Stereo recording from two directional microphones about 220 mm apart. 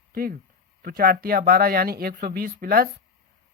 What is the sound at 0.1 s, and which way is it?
Speech, 40° right (ahead or behind).